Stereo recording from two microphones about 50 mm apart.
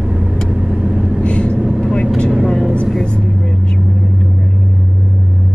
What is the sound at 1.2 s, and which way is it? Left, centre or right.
Vehicle, left.